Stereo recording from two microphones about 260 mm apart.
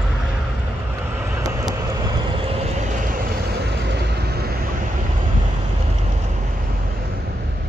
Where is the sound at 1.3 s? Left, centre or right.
Centre.